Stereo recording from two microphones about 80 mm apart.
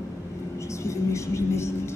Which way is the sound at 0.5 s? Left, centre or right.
Left.